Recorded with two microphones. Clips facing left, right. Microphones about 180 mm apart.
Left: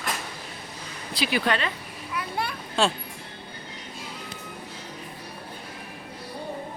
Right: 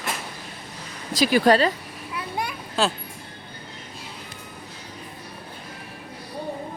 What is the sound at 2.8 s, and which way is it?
Speech, centre (ahead or behind).